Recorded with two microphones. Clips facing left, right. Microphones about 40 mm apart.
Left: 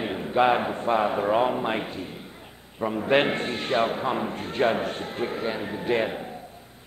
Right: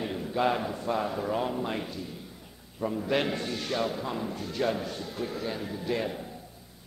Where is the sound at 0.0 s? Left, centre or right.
Left.